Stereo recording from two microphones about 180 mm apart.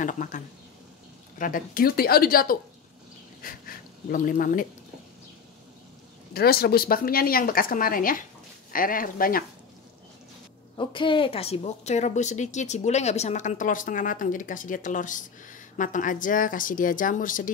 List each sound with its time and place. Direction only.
0.0 s a woman's voice: 45° left (ahead or behind)
1.4 s a woman's voice: 50° left (ahead or behind)
6.3 s a woman's voice: 60° left (ahead or behind)
10.8 s a woman's voice: 25° left (ahead or behind); by 17.5 s 45° left (ahead or behind)